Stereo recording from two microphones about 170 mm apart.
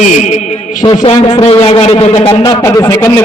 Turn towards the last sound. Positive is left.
turn(degrees=20)  # may be behind; listen again after turning